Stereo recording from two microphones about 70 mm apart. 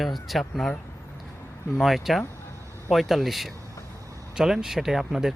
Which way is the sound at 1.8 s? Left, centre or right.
Centre.